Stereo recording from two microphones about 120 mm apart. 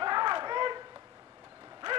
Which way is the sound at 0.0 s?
40° right (ahead or behind).